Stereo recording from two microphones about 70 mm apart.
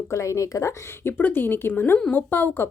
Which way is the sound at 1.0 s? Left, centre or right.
Left.